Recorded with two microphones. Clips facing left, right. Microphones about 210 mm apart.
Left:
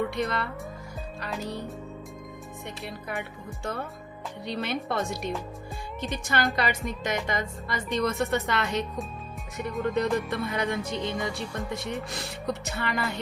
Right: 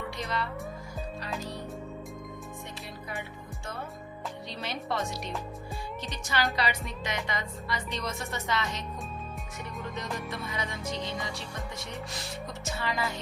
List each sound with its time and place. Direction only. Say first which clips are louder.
0.2 s a woman's voice: left 5 dB; 50° left (ahead or behind)
2.8 s speech: left 6 dB; centre (ahead or behind)
4.4 s music: left 7 dB; 60° left (ahead or behind)
6.2 s a woman's voice: left 2 dB; 50° left (ahead or behind)
10.0 s music: left 8 dB; 60° left (ahead or behind)